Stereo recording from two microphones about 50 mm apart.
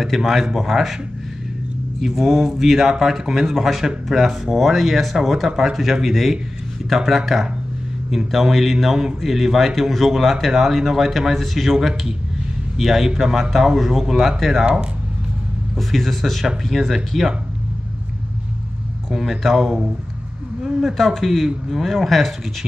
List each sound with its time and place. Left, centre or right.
0.0 s speech: centre
2.0 s speech: centre
15.7 s speech: centre
19.0 s a man's voice: centre